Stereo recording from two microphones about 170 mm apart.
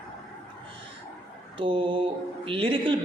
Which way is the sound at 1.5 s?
30° right (ahead or behind).